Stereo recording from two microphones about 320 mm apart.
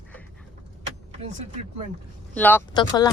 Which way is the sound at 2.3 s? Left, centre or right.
Centre.